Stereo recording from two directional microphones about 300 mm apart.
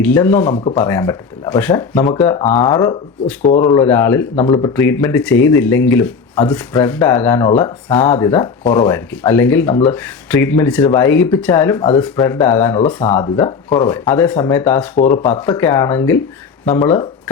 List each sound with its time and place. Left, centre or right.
0.0 s speech: centre
0.5 s speech: centre
4.4 s speech: centre
14.9 s speech: left
15.3 s speech: centre